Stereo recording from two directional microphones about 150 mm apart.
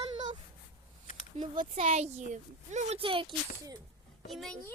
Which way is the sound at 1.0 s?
60° left (ahead or behind).